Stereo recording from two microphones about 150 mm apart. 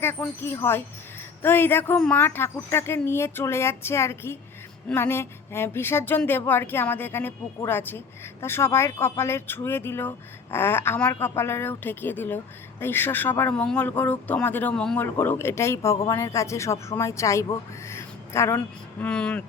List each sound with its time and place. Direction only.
0.0 s speech: 15° left (ahead or behind)